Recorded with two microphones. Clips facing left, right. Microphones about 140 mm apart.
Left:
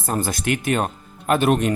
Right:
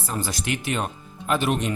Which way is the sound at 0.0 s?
50° left (ahead or behind).